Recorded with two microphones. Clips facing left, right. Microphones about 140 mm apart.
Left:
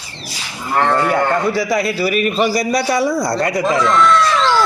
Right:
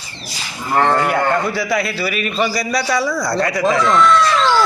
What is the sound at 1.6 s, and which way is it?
Speech, 15° left (ahead or behind).